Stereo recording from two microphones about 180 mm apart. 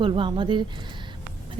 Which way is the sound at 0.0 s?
25° right (ahead or behind).